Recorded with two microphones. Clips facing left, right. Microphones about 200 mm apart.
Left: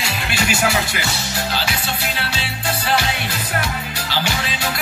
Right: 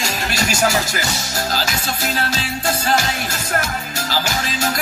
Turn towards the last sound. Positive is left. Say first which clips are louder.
# right 1 dB
turn(degrees=-45)  # may be behind; listen again after turning